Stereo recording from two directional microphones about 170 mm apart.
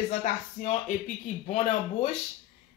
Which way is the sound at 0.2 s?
45° left (ahead or behind).